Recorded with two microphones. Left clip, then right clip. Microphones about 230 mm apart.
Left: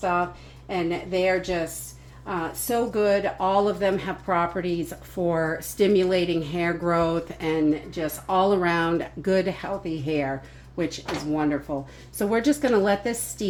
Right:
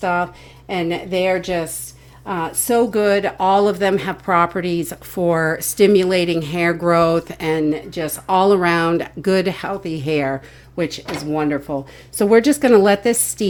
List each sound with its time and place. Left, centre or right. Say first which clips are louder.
0.0 s speech: right 5 dB; right